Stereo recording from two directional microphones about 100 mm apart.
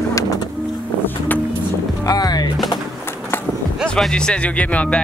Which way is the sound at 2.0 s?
40° left (ahead or behind).